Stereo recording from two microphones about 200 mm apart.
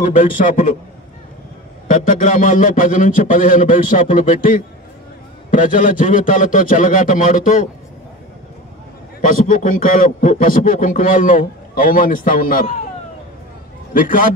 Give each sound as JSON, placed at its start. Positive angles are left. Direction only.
{"t": 0.0, "sound": "a man's voice", "side_deg": 40}
{"t": 1.9, "sound": "a man's voice", "side_deg": 40}
{"t": 9.2, "sound": "a man's voice", "side_deg": 40}
{"t": 13.9, "sound": "a man's voice", "side_deg": 45}